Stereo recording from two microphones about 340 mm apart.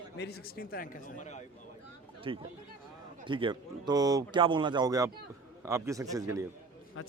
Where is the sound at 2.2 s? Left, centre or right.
Centre.